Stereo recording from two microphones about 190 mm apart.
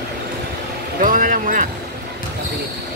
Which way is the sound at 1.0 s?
45° right (ahead or behind).